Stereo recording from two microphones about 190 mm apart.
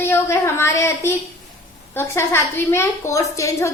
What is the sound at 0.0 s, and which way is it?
A woman's voice, 10° left (ahead or behind).